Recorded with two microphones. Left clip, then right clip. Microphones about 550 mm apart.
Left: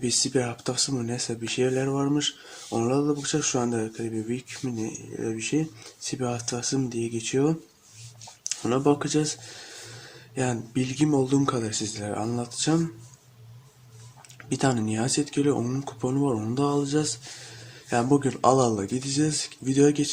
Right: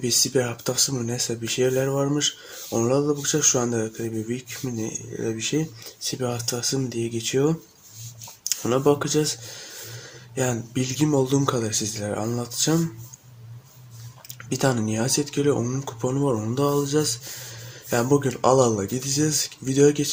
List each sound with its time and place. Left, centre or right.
0.0 s speech: left
14.5 s speech: left